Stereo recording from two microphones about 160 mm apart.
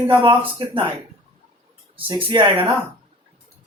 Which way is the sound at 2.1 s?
30° right (ahead or behind).